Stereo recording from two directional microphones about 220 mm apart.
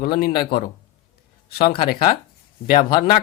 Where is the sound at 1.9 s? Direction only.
40° left (ahead or behind).